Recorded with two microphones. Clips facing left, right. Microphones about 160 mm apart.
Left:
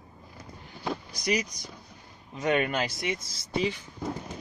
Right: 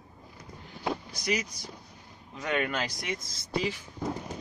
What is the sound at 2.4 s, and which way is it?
Speech, 20° left (ahead or behind).